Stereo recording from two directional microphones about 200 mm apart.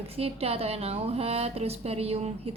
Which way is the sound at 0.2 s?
30° right (ahead or behind).